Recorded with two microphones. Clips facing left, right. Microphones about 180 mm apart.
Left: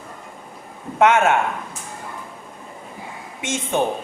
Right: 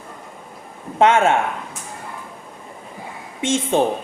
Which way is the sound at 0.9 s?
30° right (ahead or behind).